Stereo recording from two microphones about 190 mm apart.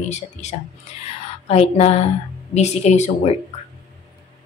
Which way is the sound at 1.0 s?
35° left (ahead or behind).